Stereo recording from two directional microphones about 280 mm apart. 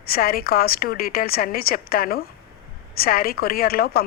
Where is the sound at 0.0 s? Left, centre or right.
Left.